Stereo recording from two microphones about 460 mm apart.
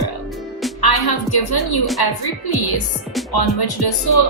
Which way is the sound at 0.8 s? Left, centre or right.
Left.